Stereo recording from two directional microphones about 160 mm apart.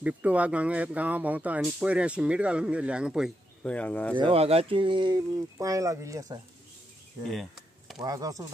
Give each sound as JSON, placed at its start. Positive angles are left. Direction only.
{"t": 0.0, "sound": "speech", "side_deg": -10}
{"t": 3.6, "sound": "speech", "side_deg": 10}
{"t": 4.2, "sound": "speech", "side_deg": -40}
{"t": 7.2, "sound": "a sound", "side_deg": 0}
{"t": 8.0, "sound": "speech", "side_deg": -25}